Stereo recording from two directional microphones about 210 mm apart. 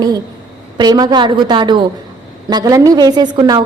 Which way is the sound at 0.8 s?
20° right (ahead or behind).